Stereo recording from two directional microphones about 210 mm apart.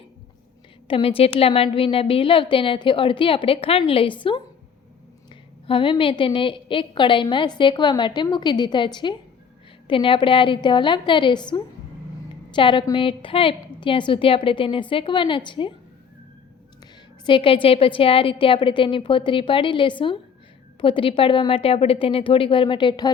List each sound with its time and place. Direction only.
0.9 s a woman's voice: 25° left (ahead or behind)
5.6 s a woman's voice: 25° left (ahead or behind)
17.2 s a woman's voice: 25° left (ahead or behind)